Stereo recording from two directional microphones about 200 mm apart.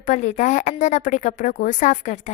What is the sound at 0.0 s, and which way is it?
A woman's voice, 40° left (ahead or behind).